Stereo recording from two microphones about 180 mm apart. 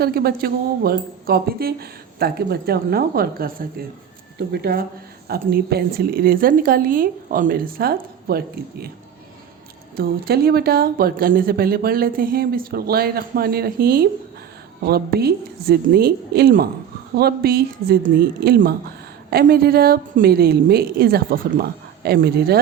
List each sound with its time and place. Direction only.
0.0 s speech: 60° right (ahead or behind)
9.9 s speech: 55° right (ahead or behind)